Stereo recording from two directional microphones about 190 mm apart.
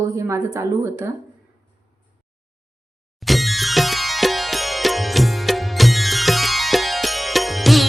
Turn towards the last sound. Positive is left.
turn(degrees=0)  # may be behind; listen again after turning